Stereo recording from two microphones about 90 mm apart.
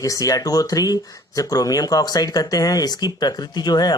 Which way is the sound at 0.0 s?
40° left (ahead or behind).